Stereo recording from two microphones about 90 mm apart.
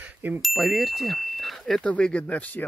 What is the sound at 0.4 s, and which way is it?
Speech, centre (ahead or behind).